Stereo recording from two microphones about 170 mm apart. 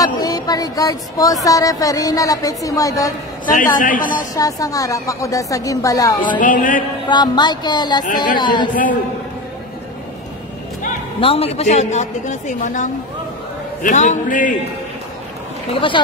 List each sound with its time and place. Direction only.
0.0 s speech: 20° left (ahead or behind)
3.4 s a man's voice: 55° left (ahead or behind)
4.4 s speech: 20° left (ahead or behind)
6.4 s a man's voice: 50° left (ahead or behind)
7.1 s speech: 25° left (ahead or behind)
11.1 s a man's voice: 35° left (ahead or behind); by 14.5 s 50° left (ahead or behind)
15.7 s speech: 30° left (ahead or behind)